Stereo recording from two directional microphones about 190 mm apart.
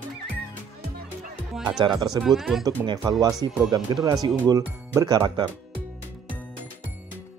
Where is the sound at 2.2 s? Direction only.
Centre (ahead or behind).